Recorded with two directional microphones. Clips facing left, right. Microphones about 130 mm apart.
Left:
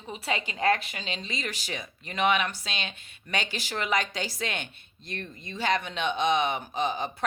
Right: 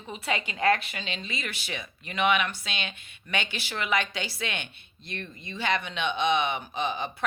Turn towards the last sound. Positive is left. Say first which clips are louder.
# left 1 dB
turn(degrees=40)  # may be behind; listen again after turning